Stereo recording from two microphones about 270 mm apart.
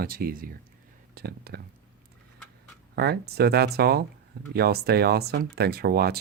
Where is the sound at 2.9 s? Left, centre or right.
Right.